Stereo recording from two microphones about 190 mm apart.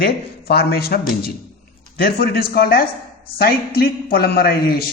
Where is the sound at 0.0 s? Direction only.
55° left (ahead or behind).